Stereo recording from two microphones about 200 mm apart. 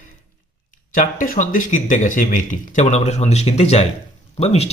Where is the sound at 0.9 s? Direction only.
40° left (ahead or behind).